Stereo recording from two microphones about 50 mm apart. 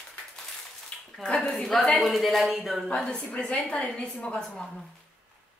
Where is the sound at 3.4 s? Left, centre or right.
Centre.